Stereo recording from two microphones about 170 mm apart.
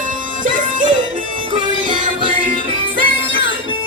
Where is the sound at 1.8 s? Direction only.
50° right (ahead or behind).